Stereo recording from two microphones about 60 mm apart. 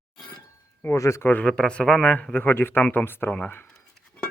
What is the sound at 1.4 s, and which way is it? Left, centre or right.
Speech, centre.